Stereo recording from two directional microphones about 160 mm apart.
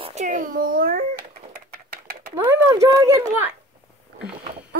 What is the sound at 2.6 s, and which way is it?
Speech, 20° right (ahead or behind).